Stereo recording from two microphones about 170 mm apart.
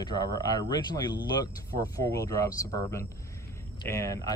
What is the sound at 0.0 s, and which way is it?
Speech, 25° left (ahead or behind).